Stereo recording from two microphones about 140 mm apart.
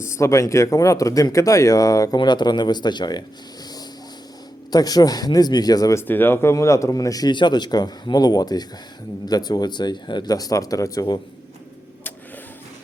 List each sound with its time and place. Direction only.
0.0 s speech: 20° left (ahead or behind)
4.7 s speech: 30° left (ahead or behind)